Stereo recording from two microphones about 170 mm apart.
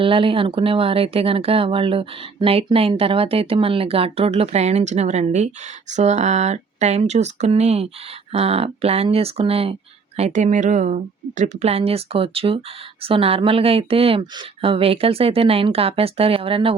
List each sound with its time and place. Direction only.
0.0 s speech: 30° right (ahead or behind)